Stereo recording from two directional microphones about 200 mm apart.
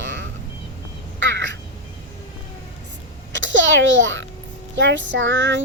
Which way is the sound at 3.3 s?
65° right (ahead or behind).